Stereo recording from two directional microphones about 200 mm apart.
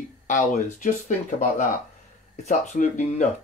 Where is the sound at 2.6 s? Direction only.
35° left (ahead or behind).